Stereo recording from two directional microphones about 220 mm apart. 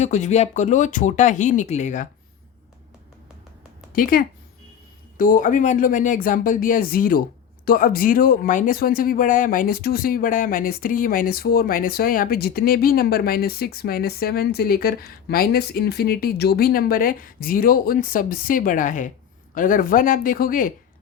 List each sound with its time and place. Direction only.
0.0 s speech: 30° left (ahead or behind)
3.9 s speech: 40° left (ahead or behind)